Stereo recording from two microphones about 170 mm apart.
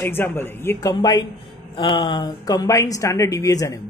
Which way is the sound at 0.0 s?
15° left (ahead or behind).